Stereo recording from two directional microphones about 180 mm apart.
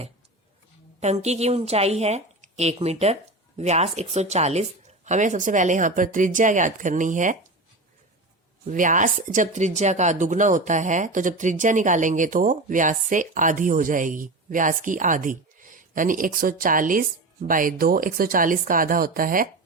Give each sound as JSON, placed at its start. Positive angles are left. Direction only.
{"t": 0.9, "sound": "a woman's voice", "side_deg": -35}
{"t": 8.6, "sound": "speech", "side_deg": -45}